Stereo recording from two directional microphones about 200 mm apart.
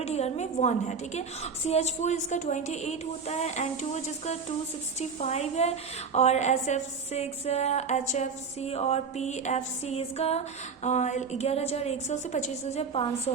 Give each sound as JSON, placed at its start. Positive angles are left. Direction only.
{"t": 0.0, "sound": "a woman's voice", "side_deg": 35}